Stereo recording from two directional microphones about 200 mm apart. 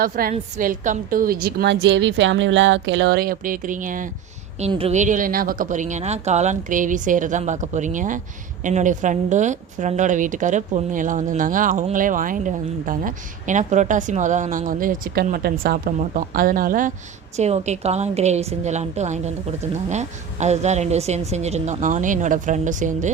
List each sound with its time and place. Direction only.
0.0 s a woman's voice: 45° right (ahead or behind)
4.6 s a woman's voice: 30° right (ahead or behind)